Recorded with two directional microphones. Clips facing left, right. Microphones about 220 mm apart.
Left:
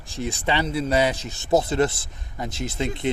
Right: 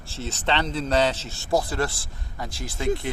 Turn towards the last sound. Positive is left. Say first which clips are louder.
# left 1 dB
turn(degrees=20)  # may be behind; listen again after turning